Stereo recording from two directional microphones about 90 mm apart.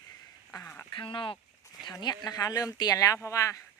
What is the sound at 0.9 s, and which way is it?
Speech, 70° left (ahead or behind).